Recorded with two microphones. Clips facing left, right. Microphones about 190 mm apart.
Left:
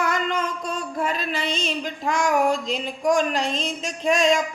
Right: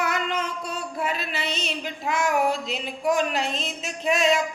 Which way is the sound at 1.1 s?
45° left (ahead or behind).